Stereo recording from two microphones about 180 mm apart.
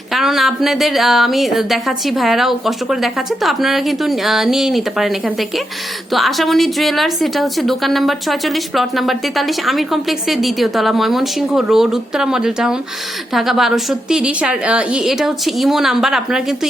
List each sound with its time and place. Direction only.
0.1 s a woman's voice: centre (ahead or behind)